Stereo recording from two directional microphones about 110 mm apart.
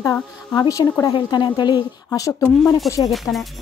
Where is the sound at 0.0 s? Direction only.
15° left (ahead or behind).